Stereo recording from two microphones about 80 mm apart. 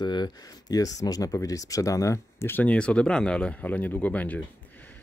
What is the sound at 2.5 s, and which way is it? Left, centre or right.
Speech, centre.